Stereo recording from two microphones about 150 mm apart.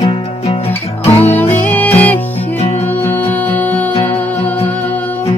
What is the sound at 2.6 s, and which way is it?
Music, 45° left (ahead or behind).